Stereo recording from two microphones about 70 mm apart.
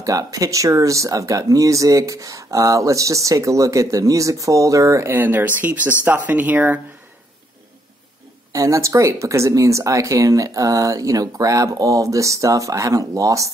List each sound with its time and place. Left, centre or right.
0.0 s speech: right
5.1 s speech: right
8.5 s speech: right